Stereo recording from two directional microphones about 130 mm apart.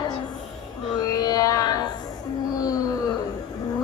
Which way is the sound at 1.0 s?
30° left (ahead or behind).